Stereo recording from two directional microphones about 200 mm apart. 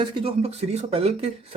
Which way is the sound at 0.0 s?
25° right (ahead or behind).